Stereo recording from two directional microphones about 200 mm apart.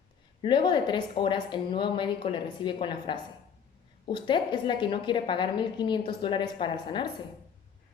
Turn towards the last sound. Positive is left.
turn(degrees=25)  # may be behind; listen again after turning